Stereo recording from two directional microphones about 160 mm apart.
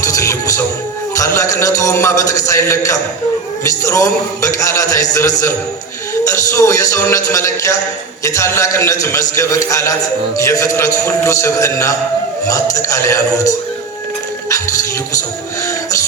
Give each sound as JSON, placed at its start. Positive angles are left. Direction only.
{"t": 0.0, "sound": "music", "side_deg": 20}
{"t": 1.1, "sound": "a man's voice", "side_deg": 20}